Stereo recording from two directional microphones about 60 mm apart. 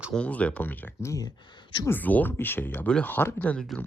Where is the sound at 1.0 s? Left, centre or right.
Left.